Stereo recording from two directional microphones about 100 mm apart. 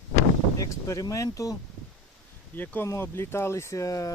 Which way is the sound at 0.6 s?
35° left (ahead or behind).